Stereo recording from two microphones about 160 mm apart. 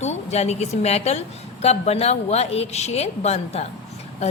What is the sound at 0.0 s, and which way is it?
A woman's voice, 45° left (ahead or behind).